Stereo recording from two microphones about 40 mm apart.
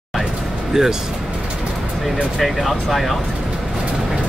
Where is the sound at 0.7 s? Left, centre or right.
Centre.